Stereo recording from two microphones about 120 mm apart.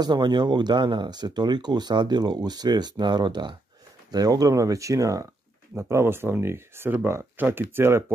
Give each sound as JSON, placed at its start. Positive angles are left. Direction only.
{"t": 0.0, "sound": "speech", "side_deg": -35}